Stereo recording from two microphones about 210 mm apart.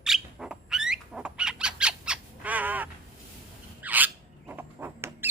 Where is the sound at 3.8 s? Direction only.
10° right (ahead or behind).